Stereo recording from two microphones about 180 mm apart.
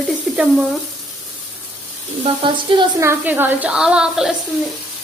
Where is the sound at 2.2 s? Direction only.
30° right (ahead or behind).